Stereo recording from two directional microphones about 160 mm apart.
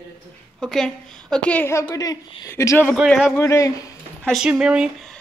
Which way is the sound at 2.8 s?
Centre (ahead or behind).